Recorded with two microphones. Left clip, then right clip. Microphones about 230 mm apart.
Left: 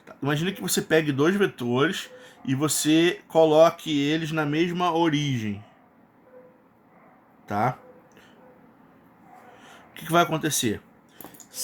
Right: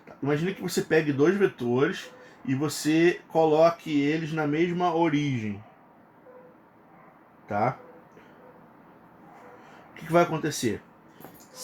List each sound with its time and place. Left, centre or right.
0.2 s speech: left
10.1 s speech: left